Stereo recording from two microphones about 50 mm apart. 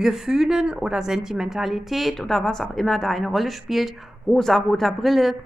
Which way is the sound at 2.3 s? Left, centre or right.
Centre.